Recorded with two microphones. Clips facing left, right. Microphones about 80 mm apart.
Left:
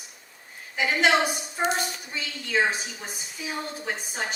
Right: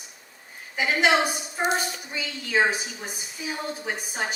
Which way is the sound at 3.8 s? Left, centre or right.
Centre.